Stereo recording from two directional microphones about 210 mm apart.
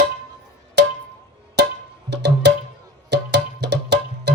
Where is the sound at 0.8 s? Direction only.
55° right (ahead or behind).